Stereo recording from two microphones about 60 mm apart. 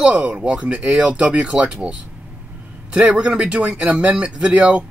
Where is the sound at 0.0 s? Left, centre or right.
Centre.